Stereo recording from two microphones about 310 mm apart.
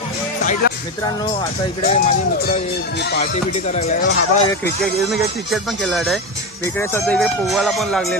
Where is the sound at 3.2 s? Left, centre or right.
Left.